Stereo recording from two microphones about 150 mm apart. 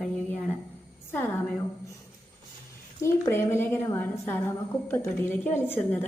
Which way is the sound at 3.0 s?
15° left (ahead or behind).